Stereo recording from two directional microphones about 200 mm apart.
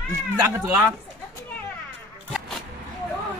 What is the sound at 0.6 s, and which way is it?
Speech, 10° right (ahead or behind).